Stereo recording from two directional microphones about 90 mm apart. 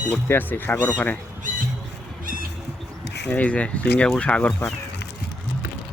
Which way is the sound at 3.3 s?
15° left (ahead or behind).